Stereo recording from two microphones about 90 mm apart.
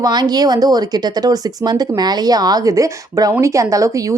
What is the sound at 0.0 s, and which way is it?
A woman's voice, 50° right (ahead or behind).